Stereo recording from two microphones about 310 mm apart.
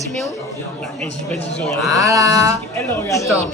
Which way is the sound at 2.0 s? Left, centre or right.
Centre.